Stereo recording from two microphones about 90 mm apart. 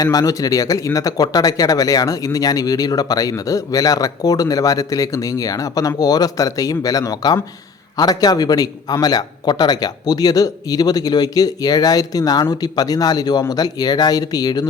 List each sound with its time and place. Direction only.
0.0 s a man's voice: 45° left (ahead or behind)